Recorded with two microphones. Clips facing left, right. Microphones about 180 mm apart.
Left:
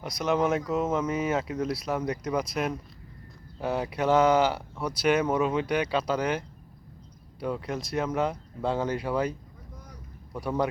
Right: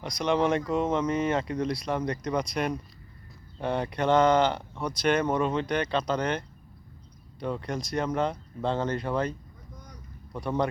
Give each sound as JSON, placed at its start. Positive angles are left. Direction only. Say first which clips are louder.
{"t": 0.0, "sound": "speech", "louder": "even", "side_deg": 5}
{"t": 10.3, "sound": "speech", "louder": "even", "side_deg": 10}